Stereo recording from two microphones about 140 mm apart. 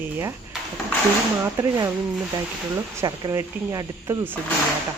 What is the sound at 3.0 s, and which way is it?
Speech, 20° right (ahead or behind).